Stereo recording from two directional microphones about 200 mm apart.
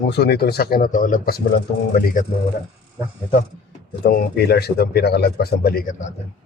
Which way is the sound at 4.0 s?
50° left (ahead or behind).